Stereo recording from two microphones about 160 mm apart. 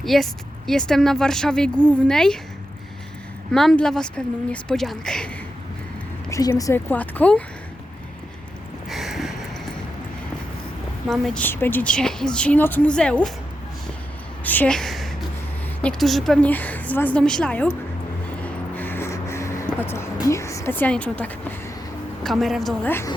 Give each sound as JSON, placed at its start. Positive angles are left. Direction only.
{"t": 0.0, "sound": "speech", "side_deg": 0}
{"t": 3.5, "sound": "speech", "side_deg": 0}
{"t": 6.3, "sound": "a woman's voice", "side_deg": 20}
{"t": 8.9, "sound": "a sound", "side_deg": 0}
{"t": 11.1, "sound": "a woman's voice", "side_deg": 0}
{"t": 14.4, "sound": "a sound", "side_deg": 10}
{"t": 15.8, "sound": "a woman's voice", "side_deg": 5}
{"t": 18.4, "sound": "a sound", "side_deg": 10}
{"t": 20.2, "sound": "a woman's voice", "side_deg": 20}
{"t": 22.9, "sound": "a woman's voice", "side_deg": 15}